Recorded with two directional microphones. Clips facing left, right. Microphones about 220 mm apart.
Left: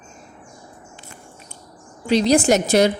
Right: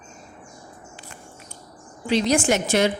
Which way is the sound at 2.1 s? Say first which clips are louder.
Left 4 dB; 35° left (ahead or behind).